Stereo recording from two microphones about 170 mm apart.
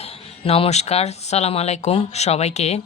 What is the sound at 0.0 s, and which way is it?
Speech, 35° left (ahead or behind).